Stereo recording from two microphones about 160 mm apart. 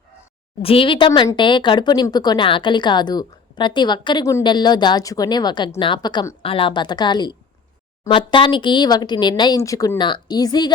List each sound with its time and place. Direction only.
0.6 s speech: 35° left (ahead or behind)